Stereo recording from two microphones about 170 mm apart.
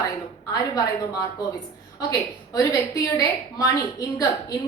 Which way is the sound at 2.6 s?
20° left (ahead or behind).